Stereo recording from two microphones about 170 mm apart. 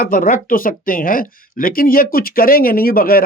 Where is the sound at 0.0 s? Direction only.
55° left (ahead or behind).